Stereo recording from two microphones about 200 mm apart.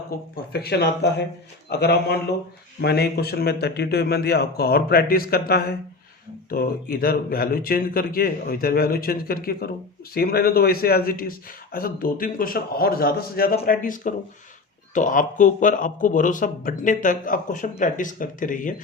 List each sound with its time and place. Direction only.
0.1 s a man's voice: 50° left (ahead or behind)